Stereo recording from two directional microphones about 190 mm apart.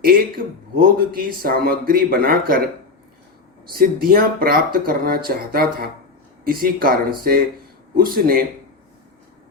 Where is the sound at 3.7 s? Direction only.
50° right (ahead or behind).